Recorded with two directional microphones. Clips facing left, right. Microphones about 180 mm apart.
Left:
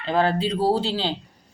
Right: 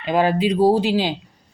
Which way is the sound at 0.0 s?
15° right (ahead or behind).